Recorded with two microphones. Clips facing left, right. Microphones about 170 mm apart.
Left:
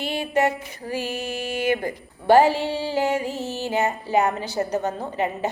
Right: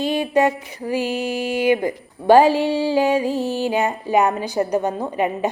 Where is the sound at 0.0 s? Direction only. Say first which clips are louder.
Right 4 dB; 15° right (ahead or behind).